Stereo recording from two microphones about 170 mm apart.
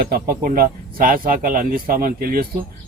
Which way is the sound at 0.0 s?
60° right (ahead or behind).